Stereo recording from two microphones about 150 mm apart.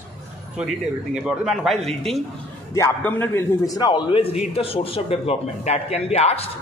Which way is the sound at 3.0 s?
15° left (ahead or behind).